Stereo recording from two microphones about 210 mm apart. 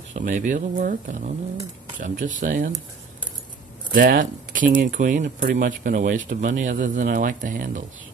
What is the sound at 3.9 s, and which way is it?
Speech, 40° right (ahead or behind).